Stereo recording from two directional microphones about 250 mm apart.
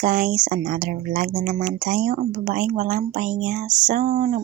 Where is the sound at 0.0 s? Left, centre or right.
Right.